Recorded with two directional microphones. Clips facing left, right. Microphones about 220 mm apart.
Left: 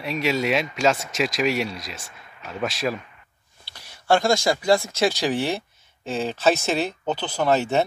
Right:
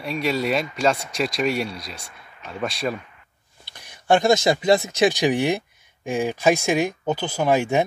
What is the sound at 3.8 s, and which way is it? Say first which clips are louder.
Speech: right 2 dB; 15° right (ahead or behind).